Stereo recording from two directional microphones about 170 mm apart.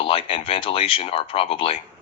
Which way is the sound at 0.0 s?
30° left (ahead or behind).